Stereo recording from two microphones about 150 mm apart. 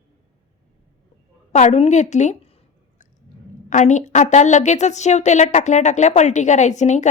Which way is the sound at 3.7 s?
55° left (ahead or behind).